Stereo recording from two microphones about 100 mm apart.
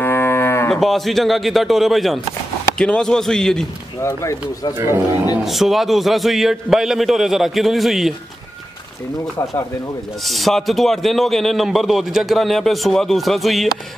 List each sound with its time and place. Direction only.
0.0 s moo: 25° left (ahead or behind)
0.7 s a man's voice: centre (ahead or behind)
4.0 s speech: 30° left (ahead or behind)
4.7 s a man's voice: 25° right (ahead or behind)
5.4 s a man's voice: centre (ahead or behind)
10.2 s a man's voice: centre (ahead or behind)